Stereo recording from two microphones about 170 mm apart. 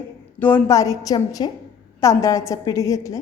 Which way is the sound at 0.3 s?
10° left (ahead or behind).